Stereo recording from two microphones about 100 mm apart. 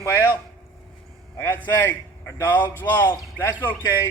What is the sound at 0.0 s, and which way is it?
Speech, 25° left (ahead or behind).